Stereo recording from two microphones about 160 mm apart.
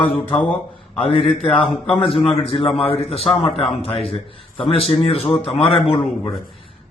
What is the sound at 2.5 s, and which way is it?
A man's voice, 35° left (ahead or behind).